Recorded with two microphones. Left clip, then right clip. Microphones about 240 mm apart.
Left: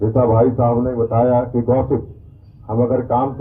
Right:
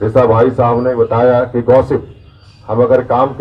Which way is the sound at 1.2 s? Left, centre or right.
Right.